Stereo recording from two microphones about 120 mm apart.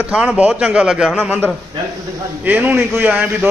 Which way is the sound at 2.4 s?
15° right (ahead or behind).